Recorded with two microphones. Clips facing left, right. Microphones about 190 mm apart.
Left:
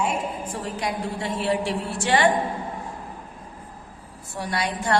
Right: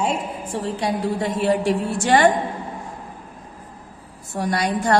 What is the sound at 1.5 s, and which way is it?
Speech, 45° right (ahead or behind).